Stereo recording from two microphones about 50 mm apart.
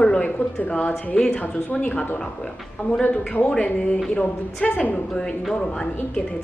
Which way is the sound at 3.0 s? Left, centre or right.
Left.